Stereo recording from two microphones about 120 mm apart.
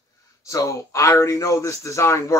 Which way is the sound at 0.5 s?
25° left (ahead or behind).